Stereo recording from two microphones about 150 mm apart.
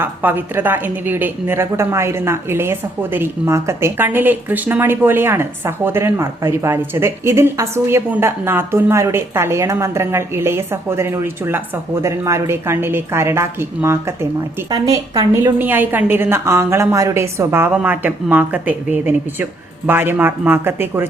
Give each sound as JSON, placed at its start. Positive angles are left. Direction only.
{"t": 0.0, "sound": "a woman's voice", "side_deg": -15}
{"t": 15.5, "sound": "a woman's voice", "side_deg": -10}